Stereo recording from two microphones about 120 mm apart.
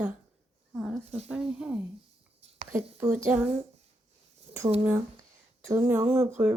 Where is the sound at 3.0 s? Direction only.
20° right (ahead or behind).